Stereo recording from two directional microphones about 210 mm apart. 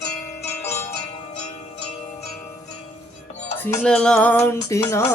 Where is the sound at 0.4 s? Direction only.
30° left (ahead or behind).